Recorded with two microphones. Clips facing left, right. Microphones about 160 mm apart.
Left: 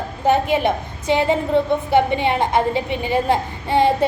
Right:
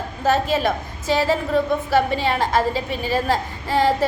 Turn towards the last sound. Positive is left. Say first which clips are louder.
# left 2 dB
turn(degrees=25)  # may be behind; listen again after turning